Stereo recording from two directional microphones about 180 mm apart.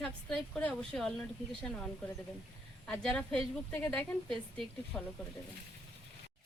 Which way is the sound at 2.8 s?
5° left (ahead or behind).